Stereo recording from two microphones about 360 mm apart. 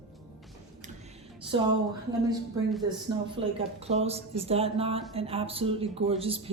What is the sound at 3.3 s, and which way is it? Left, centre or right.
A woman's voice, centre.